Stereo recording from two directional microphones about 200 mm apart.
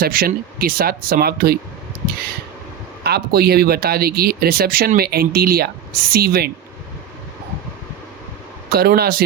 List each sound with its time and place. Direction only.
0.0 s speech: 45° right (ahead or behind)
3.0 s speech: 50° right (ahead or behind)
8.7 s speech: 50° right (ahead or behind)